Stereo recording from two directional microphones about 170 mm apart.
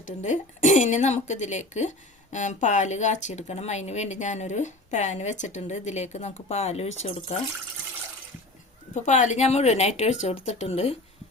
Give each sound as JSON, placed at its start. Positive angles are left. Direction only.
{"t": 0.0, "sound": "a woman's voice", "side_deg": 45}
{"t": 9.0, "sound": "speech", "side_deg": 45}